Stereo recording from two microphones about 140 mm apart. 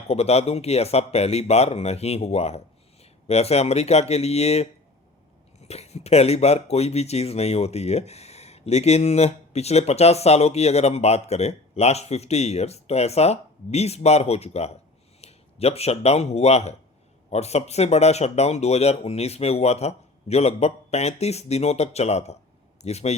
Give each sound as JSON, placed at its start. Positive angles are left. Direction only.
{"t": 0.1, "sound": "speech", "side_deg": 50}